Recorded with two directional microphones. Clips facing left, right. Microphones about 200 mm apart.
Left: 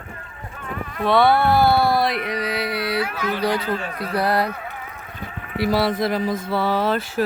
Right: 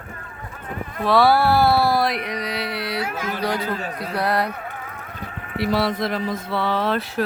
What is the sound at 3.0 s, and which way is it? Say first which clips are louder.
Speech: left 1 dB; 45° right (ahead or behind).